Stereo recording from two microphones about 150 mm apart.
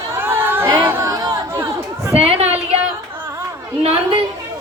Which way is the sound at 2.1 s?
40° right (ahead or behind).